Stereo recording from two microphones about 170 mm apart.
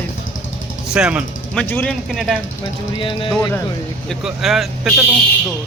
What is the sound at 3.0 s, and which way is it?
Speech, 30° left (ahead or behind).